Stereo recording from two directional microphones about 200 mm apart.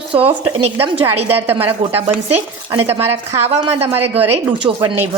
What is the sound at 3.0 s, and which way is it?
Speech, 10° right (ahead or behind).